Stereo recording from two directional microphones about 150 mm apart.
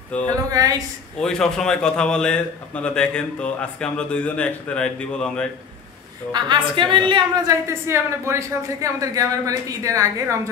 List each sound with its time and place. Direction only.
0.3 s speech: 25° right (ahead or behind)
1.2 s a man's voice: 5° left (ahead or behind)
6.3 s a woman's voice: 30° right (ahead or behind)
7.4 s speech: 15° right (ahead or behind)